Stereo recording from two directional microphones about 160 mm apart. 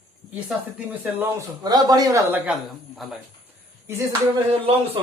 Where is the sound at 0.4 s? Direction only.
10° right (ahead or behind).